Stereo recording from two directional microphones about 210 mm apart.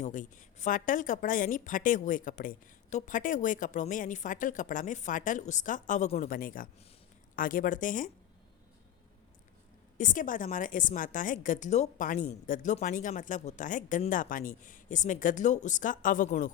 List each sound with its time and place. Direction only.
0.0 s a woman's voice: 35° left (ahead or behind)
10.0 s a woman's voice: 40° left (ahead or behind)